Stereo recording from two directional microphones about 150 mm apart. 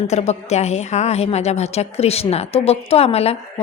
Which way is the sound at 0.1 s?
45° left (ahead or behind).